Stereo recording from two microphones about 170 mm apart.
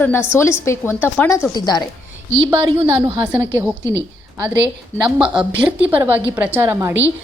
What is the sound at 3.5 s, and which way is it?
Speech, 15° left (ahead or behind).